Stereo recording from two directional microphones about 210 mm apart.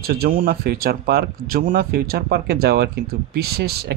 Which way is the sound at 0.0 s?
45° right (ahead or behind).